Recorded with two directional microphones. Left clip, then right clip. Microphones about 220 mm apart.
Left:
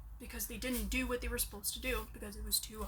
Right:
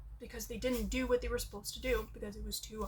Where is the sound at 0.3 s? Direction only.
5° left (ahead or behind).